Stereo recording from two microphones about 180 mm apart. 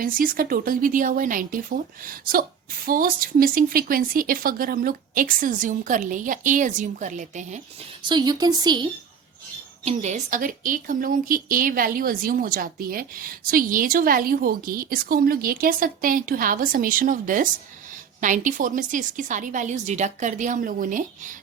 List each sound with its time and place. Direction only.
0.0 s a woman's voice: 50° right (ahead or behind)
8.0 s a woman's voice: 25° right (ahead or behind)
9.8 s a woman's voice: 40° right (ahead or behind)